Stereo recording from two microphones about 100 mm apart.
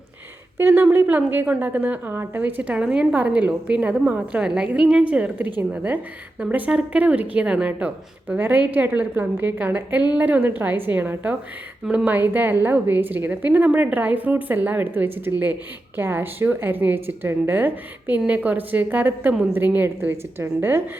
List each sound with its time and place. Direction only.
0.6 s a woman's voice: 20° right (ahead or behind)